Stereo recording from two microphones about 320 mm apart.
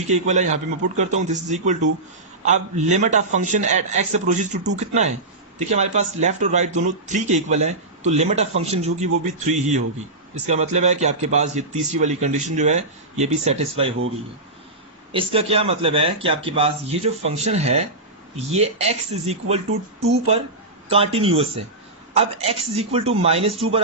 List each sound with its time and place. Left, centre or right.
0.1 s a man's voice: right
15.1 s a man's voice: centre